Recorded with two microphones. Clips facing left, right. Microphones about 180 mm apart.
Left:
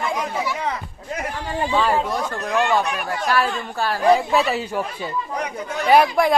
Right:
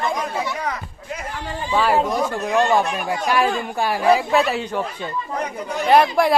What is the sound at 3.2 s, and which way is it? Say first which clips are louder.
Speech: right 2 dB; 15° right (ahead or behind).